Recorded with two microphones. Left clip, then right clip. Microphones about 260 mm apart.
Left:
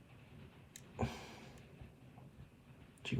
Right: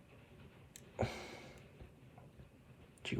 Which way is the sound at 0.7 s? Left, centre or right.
Right.